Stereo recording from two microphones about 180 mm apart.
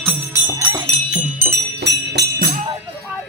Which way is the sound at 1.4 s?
65° right (ahead or behind).